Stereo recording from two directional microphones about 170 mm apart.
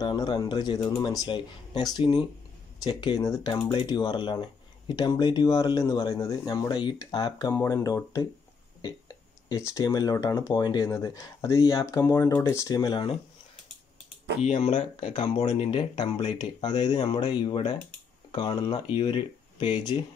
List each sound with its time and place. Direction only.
0.0 s speech: 25° left (ahead or behind)
9.5 s speech: 15° left (ahead or behind)
14.4 s speech: 40° left (ahead or behind)